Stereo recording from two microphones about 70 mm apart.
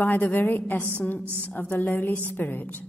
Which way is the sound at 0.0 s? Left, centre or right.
Left.